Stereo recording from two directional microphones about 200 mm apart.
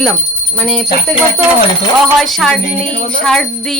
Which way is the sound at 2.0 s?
Centre (ahead or behind).